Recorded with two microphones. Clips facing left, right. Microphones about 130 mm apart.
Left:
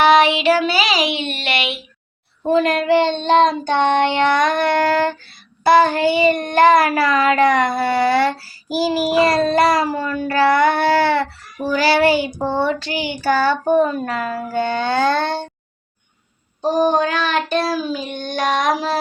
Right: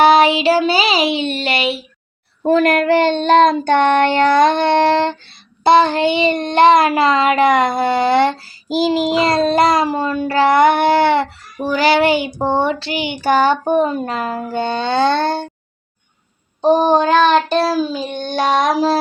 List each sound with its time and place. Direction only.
0.0 s child singing: 35° right (ahead or behind)
2.4 s child singing: 60° right (ahead or behind); by 15.3 s 25° right (ahead or behind)
16.6 s child singing: 25° right (ahead or behind)